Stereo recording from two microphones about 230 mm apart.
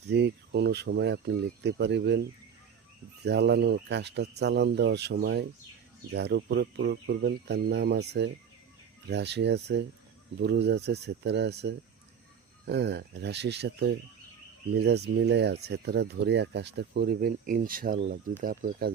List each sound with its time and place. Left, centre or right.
0.1 s speech: right
3.2 s speech: right